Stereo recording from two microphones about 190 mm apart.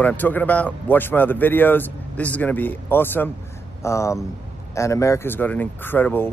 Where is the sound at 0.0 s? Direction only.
10° left (ahead or behind).